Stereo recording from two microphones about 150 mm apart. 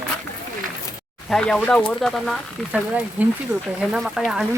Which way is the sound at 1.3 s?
5° left (ahead or behind).